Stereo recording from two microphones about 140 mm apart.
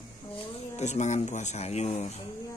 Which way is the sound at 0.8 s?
55° left (ahead or behind).